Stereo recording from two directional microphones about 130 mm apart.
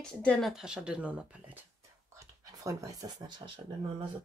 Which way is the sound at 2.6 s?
25° right (ahead or behind).